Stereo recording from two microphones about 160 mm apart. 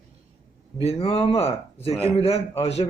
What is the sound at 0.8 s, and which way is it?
Speech, 35° left (ahead or behind).